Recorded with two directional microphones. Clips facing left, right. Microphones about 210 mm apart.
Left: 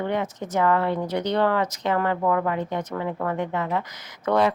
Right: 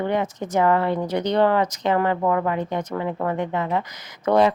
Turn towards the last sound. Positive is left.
turn(degrees=-20)  # may be behind; listen again after turning